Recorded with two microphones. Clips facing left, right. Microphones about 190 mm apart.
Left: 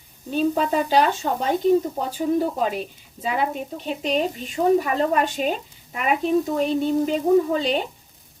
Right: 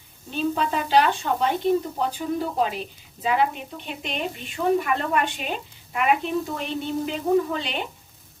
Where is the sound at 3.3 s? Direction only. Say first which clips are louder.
Right 1 dB; 40° left (ahead or behind).